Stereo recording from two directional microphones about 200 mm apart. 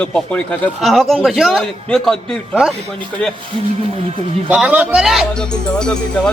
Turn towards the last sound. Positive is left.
turn(degrees=5)  # may be behind; listen again after turning